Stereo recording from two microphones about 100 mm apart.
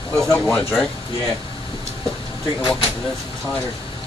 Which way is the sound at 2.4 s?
55° left (ahead or behind).